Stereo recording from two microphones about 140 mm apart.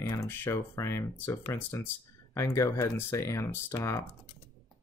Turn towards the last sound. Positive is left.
turn(degrees=20)  # may be behind; listen again after turning